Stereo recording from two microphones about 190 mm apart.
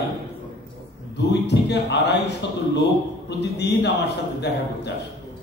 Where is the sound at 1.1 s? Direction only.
65° left (ahead or behind).